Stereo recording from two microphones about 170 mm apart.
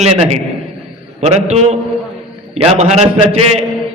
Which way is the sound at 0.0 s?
40° right (ahead or behind).